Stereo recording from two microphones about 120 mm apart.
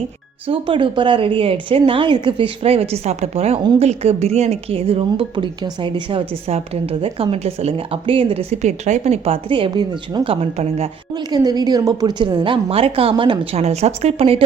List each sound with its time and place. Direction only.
0.4 s speech: 45° right (ahead or behind)
10.2 s speech: 60° right (ahead or behind)
11.3 s a woman's voice: 35° right (ahead or behind)
12.6 s speech: 55° right (ahead or behind)
13.6 s speech: 65° right (ahead or behind)